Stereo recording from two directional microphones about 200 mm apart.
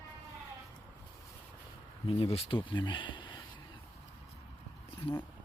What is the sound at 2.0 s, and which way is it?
Speech, 30° left (ahead or behind).